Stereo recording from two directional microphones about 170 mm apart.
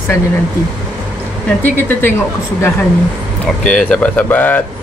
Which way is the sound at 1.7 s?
10° left (ahead or behind).